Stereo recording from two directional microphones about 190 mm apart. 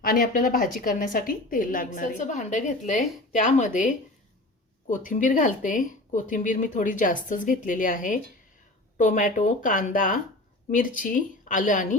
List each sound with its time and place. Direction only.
0.0 s a woman's voice: 50° left (ahead or behind)